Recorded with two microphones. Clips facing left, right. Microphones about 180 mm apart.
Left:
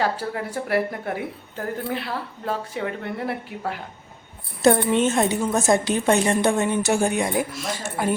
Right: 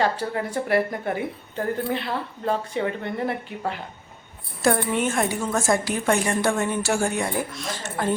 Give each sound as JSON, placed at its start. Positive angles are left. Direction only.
{"t": 0.0, "sound": "a woman's voice", "side_deg": 5}
{"t": 4.6, "sound": "a woman's voice", "side_deg": 25}
{"t": 7.5, "sound": "speech", "side_deg": 5}